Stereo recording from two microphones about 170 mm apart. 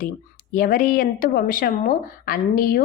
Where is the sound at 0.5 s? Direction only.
55° left (ahead or behind).